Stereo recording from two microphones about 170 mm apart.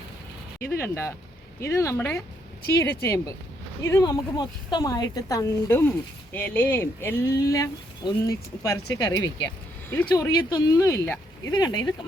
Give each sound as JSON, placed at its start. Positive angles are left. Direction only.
{"t": 0.8, "sound": "speech", "side_deg": 15}